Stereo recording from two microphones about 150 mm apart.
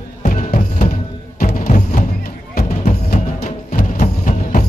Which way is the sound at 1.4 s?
65° left (ahead or behind).